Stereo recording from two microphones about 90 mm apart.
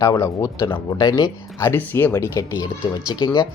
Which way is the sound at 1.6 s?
30° left (ahead or behind).